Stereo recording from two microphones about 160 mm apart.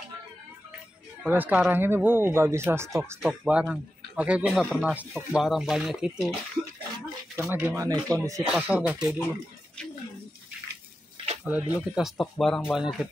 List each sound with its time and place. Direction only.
1.2 s speech: 10° right (ahead or behind)
7.3 s speech: 15° right (ahead or behind)
8.5 s speech: 10° right (ahead or behind)
11.4 s speech: 10° right (ahead or behind)